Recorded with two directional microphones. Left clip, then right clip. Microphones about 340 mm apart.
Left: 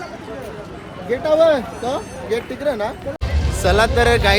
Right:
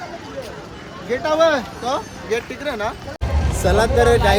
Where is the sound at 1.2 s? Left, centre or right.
Centre.